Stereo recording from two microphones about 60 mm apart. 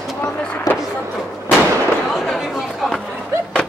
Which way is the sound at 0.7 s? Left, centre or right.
Left.